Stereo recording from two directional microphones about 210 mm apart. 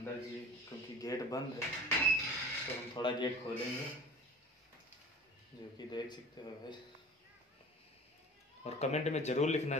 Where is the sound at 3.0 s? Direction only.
20° left (ahead or behind).